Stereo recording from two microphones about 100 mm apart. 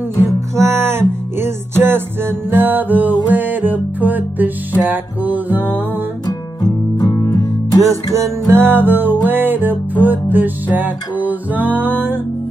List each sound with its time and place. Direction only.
0.6 s music: 25° right (ahead or behind)
6.2 s music: 40° left (ahead or behind)
7.8 s music: 30° right (ahead or behind)